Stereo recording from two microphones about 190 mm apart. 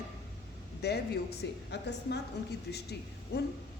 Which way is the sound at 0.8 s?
60° left (ahead or behind).